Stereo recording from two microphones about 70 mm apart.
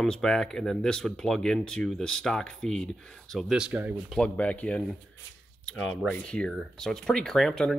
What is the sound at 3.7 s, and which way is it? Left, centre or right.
Speech, right.